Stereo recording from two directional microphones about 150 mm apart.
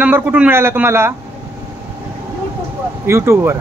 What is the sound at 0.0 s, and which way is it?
A man's voice, 10° right (ahead or behind).